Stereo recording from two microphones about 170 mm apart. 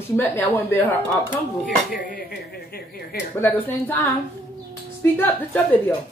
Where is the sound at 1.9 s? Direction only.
60° left (ahead or behind).